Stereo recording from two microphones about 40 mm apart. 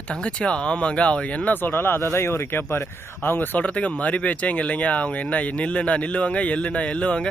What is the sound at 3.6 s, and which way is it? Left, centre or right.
Speech, left.